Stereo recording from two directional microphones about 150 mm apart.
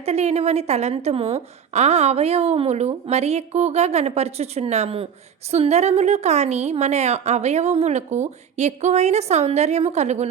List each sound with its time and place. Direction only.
0.0 s a woman's voice: 45° right (ahead or behind)